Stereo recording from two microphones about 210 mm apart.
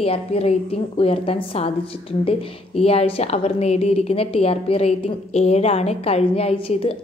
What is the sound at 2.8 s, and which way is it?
A woman's voice, 30° left (ahead or behind).